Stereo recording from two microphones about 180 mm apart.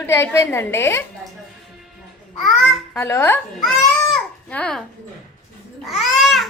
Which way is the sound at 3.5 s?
Centre (ahead or behind).